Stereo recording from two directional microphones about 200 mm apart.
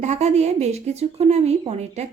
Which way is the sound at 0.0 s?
35° right (ahead or behind).